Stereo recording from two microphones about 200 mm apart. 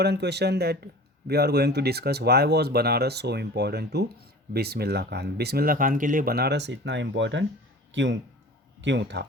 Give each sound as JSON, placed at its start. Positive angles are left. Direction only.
{"t": 0.0, "sound": "speech", "side_deg": -55}